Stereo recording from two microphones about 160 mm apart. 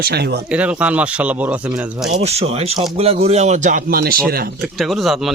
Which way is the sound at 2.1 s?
40° right (ahead or behind).